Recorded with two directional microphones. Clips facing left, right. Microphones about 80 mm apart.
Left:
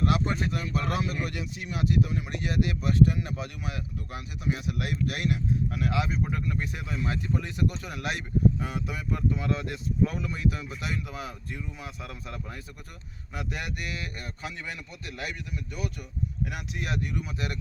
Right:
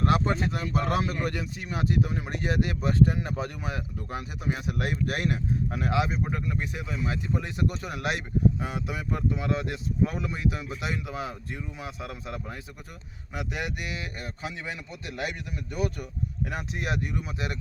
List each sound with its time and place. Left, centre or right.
0.0 s speech: right
6.5 s speech: centre
7.8 s speech: right
15.2 s speech: right
17.3 s speech: right